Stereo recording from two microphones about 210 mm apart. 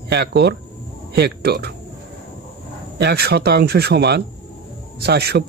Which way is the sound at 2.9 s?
50° right (ahead or behind).